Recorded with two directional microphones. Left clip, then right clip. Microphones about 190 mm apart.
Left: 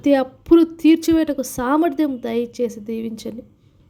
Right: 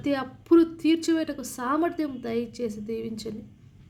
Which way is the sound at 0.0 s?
40° left (ahead or behind).